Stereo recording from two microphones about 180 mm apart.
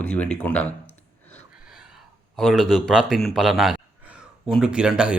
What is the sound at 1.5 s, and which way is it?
Speech, 5° right (ahead or behind).